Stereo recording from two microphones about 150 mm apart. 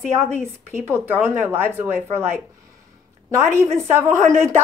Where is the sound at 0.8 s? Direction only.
15° right (ahead or behind).